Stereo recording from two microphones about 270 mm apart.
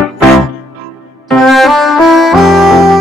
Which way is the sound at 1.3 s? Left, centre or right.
Centre.